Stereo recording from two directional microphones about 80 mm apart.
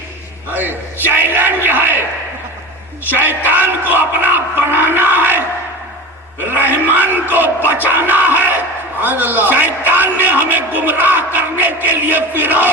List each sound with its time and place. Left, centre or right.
0.5 s a sound: right
3.1 s a man's voice: right
4.7 s a sound: right
6.6 s crowd: right
7.7 s music: right
9.0 s a man's voice: right